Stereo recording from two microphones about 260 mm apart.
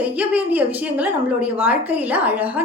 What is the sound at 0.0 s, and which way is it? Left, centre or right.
A woman's voice, centre.